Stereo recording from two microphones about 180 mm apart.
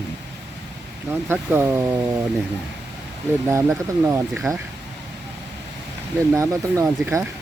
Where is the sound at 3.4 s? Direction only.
15° right (ahead or behind).